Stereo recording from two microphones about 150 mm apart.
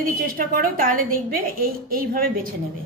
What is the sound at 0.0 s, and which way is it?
A woman's voice, 70° right (ahead or behind).